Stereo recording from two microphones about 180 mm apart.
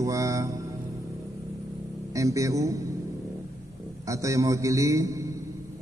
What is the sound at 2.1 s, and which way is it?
Speech, 20° right (ahead or behind).